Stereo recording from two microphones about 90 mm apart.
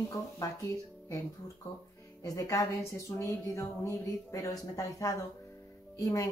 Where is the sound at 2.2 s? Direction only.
40° left (ahead or behind).